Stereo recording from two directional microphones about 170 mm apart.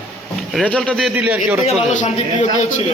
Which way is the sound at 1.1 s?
10° right (ahead or behind).